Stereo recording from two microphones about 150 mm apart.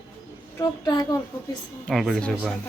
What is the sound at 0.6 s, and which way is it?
Speech, 25° left (ahead or behind).